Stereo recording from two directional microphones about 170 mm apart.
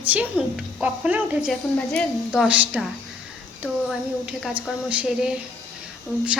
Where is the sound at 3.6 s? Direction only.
5° left (ahead or behind).